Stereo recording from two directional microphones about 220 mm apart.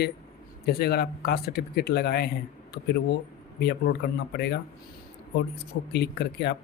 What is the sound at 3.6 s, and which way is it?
Speech, 50° left (ahead or behind).